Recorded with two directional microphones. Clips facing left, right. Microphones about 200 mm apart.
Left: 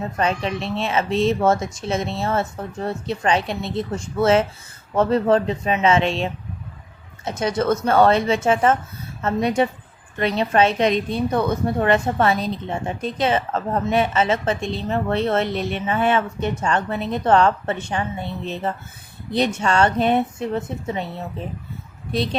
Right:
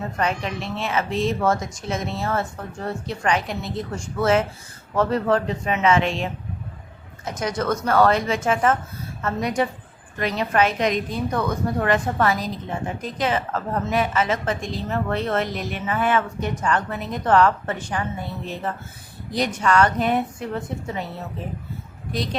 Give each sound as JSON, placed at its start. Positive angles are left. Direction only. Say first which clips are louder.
{"t": 0.2, "sound": "a woman's voice", "louder": "left 3 dB", "side_deg": 25}
{"t": 22.1, "sound": "a woman's voice", "louder": "left 4 dB", "side_deg": 25}